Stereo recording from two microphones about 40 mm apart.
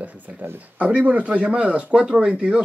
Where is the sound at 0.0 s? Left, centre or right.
Right.